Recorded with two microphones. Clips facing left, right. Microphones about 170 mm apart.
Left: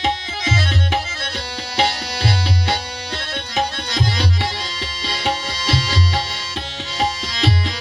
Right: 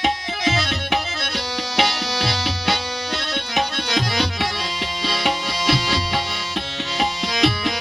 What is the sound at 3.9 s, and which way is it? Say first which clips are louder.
Music: right 2 dB; 60° right (ahead or behind).